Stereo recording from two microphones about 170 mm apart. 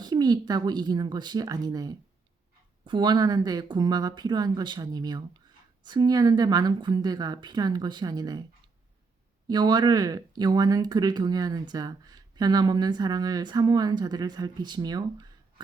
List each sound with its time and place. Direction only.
0.0 s speech: 25° right (ahead or behind)
9.5 s speech: 25° right (ahead or behind)